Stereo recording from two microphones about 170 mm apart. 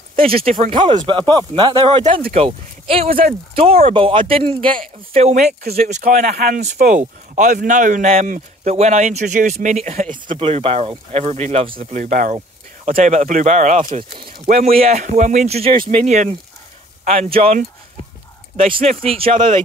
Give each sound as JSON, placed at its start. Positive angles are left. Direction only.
{"t": 0.5, "sound": "speech", "side_deg": -35}
{"t": 11.9, "sound": "speech", "side_deg": -50}
{"t": 16.0, "sound": "speech", "side_deg": -45}
{"t": 18.6, "sound": "speech", "side_deg": -35}